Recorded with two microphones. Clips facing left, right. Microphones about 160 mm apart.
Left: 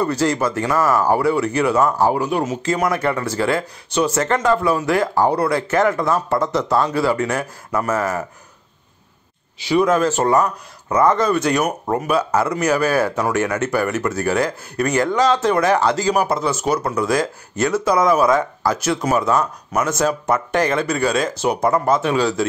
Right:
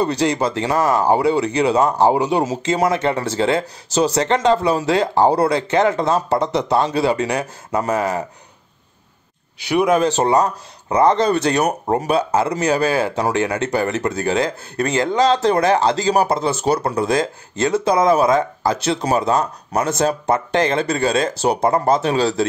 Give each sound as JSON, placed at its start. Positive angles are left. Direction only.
{"t": 0.2, "sound": "speech", "side_deg": -20}
{"t": 3.9, "sound": "speech", "side_deg": -35}
{"t": 4.3, "sound": "speech", "side_deg": -25}
{"t": 9.7, "sound": "speech", "side_deg": -15}
{"t": 10.9, "sound": "speech", "side_deg": -30}